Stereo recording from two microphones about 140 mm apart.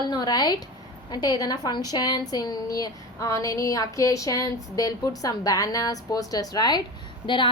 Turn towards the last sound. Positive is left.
turn(degrees=35)  # may be behind; listen again after turning